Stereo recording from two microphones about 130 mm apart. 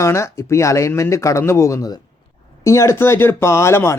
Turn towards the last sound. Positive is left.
turn(degrees=20)  # may be behind; listen again after turning